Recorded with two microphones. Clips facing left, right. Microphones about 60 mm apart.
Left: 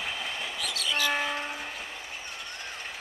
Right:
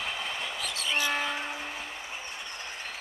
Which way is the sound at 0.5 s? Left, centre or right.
Right.